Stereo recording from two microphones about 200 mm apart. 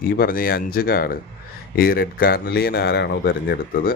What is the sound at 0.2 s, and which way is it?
Speech, 45° left (ahead or behind).